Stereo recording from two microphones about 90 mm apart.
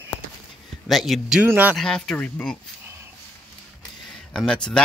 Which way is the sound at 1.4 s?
20° right (ahead or behind).